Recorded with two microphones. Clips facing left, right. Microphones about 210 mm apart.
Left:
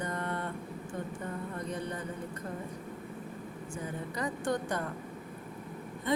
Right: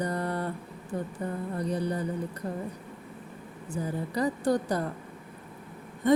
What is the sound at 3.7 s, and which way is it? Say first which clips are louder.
Mantra: right 8 dB; 35° right (ahead or behind).